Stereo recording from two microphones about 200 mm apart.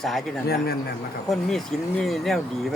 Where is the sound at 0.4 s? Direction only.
50° left (ahead or behind).